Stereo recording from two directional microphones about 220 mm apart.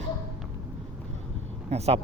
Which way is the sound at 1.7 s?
30° right (ahead or behind).